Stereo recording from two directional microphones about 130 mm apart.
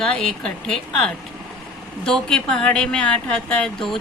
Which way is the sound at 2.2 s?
5° left (ahead or behind).